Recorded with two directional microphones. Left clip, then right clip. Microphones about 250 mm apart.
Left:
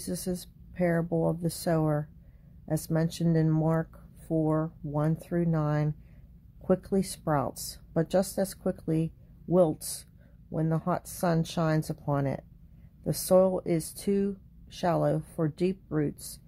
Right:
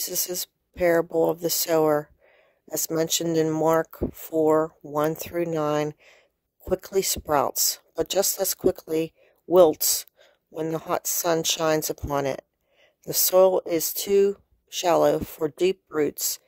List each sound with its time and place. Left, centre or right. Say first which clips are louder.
0.0 s speech: right 6 dB; right